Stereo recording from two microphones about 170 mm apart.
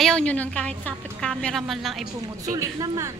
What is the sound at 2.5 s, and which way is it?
Speech, 20° right (ahead or behind).